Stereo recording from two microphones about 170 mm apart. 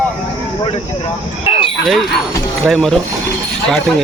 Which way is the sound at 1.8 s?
Centre (ahead or behind).